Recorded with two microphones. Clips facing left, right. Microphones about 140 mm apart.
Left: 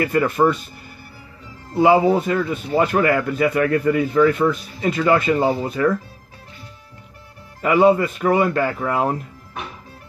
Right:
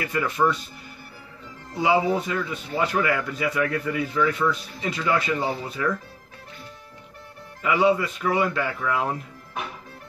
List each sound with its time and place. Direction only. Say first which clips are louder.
0.0 s speech: left 6 dB; 50° left (ahead or behind)
1.8 s speech: left 7 dB; 50° left (ahead or behind)
7.6 s speech: left 6 dB; 50° left (ahead or behind)